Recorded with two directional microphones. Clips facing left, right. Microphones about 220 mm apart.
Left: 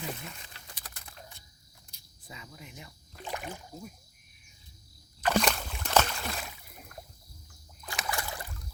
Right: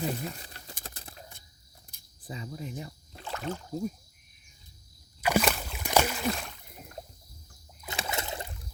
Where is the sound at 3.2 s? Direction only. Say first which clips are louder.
Right 4 dB; 15° left (ahead or behind).